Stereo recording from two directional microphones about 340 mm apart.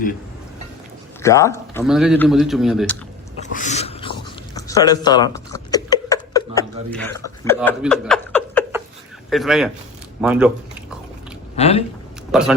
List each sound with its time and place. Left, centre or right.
1.2 s a man's voice: centre
3.4 s a sound: left; by 8.6 s centre
9.3 s a man's voice: centre
11.5 s speech: centre
12.3 s a man's voice: centre